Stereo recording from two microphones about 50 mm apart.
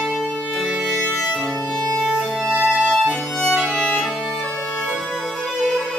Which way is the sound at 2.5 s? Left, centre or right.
Right.